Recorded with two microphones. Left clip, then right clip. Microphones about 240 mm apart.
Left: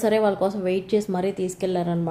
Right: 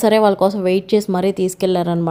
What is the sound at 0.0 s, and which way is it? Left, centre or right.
A woman's voice, right.